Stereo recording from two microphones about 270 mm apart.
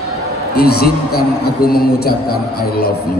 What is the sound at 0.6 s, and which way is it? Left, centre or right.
Speech, left.